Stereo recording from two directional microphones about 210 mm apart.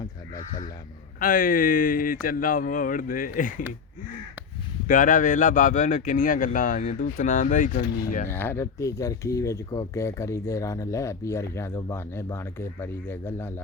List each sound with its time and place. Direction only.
1.2 s speech: 40° left (ahead or behind)
4.9 s speech: 40° left (ahead or behind)
8.3 s speech: 10° left (ahead or behind)